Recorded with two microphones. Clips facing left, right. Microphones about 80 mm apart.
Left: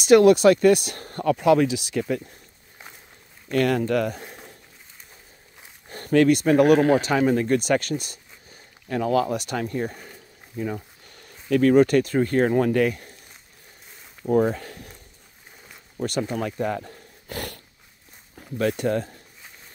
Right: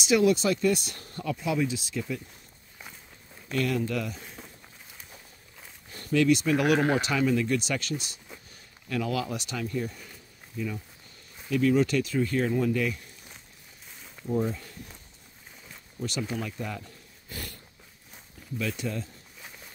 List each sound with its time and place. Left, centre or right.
0.0 s speech: left
3.4 s speech: left
5.9 s speech: left
8.8 s speech: left
11.1 s speech: left
14.2 s speech: left
16.0 s speech: left
18.6 s speech: left